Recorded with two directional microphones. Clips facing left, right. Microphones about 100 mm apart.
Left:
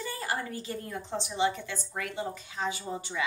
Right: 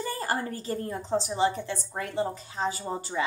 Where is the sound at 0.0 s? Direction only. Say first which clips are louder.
Right 4 dB; 40° right (ahead or behind).